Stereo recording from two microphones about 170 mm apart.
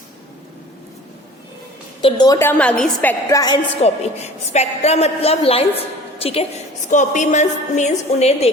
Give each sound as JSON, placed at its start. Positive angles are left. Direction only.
{"t": 2.0, "sound": "a woman's voice", "side_deg": 30}
{"t": 3.8, "sound": "a woman's voice", "side_deg": 40}
{"t": 6.8, "sound": "a woman's voice", "side_deg": 45}